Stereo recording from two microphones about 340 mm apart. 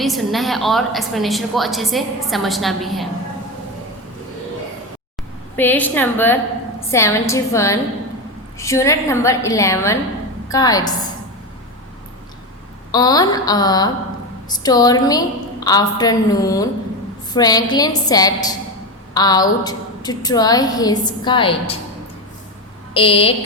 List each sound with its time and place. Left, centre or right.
0.0 s a woman's voice: centre
5.5 s a woman's voice: centre
12.9 s a woman's voice: centre
23.0 s a woman's voice: centre